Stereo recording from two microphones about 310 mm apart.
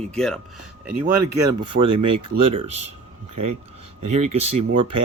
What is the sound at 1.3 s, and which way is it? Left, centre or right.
Speech, right.